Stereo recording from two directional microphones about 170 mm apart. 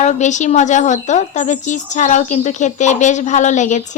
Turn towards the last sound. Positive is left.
turn(degrees=45)  # may be behind; listen again after turning